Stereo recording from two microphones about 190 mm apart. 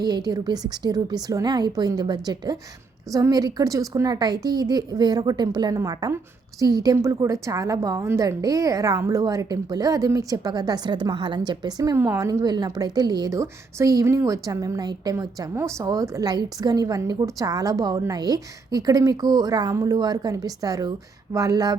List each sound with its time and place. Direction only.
0.0 s a woman's voice: 20° right (ahead or behind)